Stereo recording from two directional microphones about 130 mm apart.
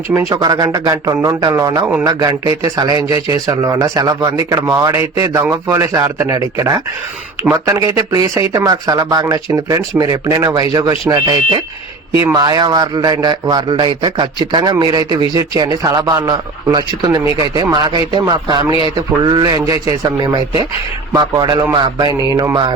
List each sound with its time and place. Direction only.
0.1 s speech: 20° right (ahead or behind)
0.3 s a man's voice: 30° right (ahead or behind)